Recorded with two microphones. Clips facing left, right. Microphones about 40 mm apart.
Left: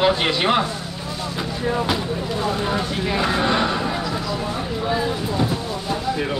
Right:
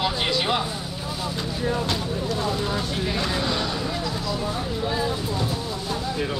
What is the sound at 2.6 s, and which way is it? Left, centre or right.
Speech, left.